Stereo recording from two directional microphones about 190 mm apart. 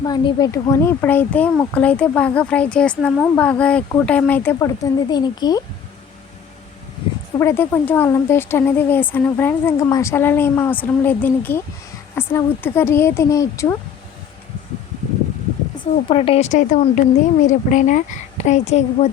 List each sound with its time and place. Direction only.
0.0 s speech: 20° left (ahead or behind)
7.3 s speech: 15° left (ahead or behind)
16.0 s a woman's voice: 30° left (ahead or behind)